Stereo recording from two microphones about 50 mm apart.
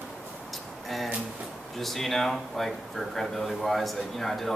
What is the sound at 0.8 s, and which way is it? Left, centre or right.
A man's voice, centre.